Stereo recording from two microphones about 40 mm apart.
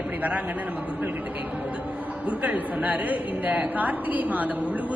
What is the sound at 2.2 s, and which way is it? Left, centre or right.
A woman's voice, right.